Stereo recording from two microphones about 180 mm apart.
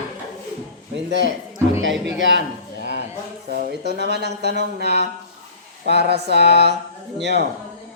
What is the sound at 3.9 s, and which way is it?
Speech, 65° right (ahead or behind).